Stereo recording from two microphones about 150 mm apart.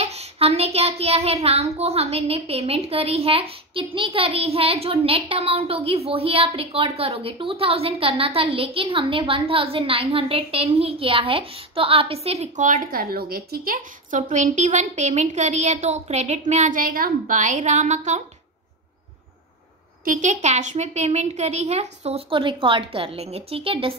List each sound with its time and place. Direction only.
0.0 s a child's voice: 45° right (ahead or behind)
20.1 s a woman's voice: 55° right (ahead or behind); by 23.9 s 35° right (ahead or behind)